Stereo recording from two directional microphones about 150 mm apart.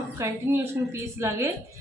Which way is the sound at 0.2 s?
15° right (ahead or behind).